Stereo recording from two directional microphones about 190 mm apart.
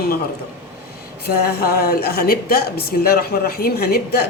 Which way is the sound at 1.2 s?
55° left (ahead or behind).